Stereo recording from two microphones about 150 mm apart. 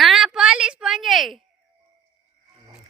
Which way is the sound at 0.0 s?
Centre (ahead or behind).